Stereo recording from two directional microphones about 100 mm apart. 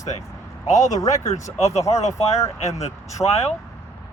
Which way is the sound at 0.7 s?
35° left (ahead or behind).